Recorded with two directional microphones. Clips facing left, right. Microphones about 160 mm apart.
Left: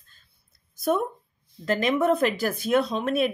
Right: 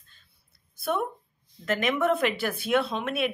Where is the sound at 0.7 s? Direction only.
40° left (ahead or behind).